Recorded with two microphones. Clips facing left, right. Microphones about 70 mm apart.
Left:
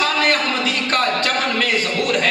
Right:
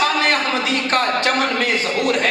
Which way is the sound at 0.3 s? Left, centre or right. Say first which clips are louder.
Even; right.